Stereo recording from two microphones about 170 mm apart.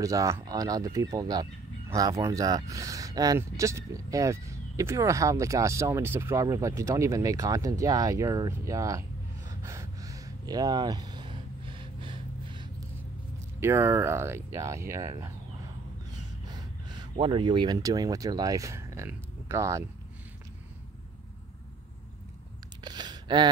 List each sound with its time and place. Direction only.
0.0 s speech: 20° right (ahead or behind)
9.5 s gasp: 20° right (ahead or behind)
13.6 s speech: 15° right (ahead or behind)
16.4 s speech: 25° right (ahead or behind)
22.8 s gasp: 25° right (ahead or behind)